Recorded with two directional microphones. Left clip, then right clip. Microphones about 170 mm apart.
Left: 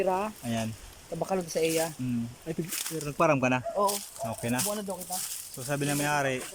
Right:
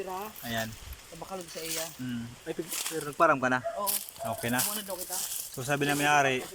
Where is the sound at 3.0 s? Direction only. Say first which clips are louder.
Even; 10° left (ahead or behind).